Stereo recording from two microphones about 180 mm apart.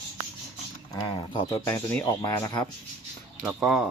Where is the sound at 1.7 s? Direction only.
15° left (ahead or behind).